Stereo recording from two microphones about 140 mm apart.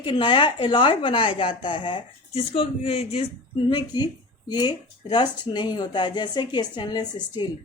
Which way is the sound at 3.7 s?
30° left (ahead or behind).